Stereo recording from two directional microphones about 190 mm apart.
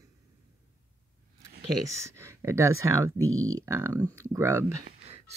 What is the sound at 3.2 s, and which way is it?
Speech, 90° right.